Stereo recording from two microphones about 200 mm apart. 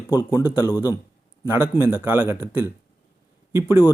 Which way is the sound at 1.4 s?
10° right (ahead or behind).